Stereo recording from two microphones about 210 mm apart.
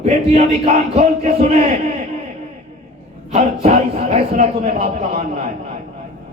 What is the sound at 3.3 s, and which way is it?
A man's voice, 30° right (ahead or behind).